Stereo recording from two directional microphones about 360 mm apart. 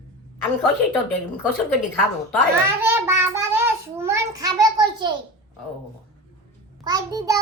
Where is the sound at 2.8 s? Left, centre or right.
Centre.